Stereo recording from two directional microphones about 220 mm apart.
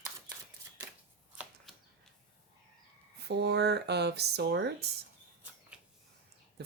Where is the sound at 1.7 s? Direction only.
Centre (ahead or behind).